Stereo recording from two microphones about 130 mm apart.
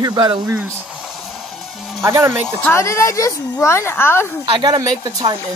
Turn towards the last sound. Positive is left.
turn(degrees=-30)  # may be behind; listen again after turning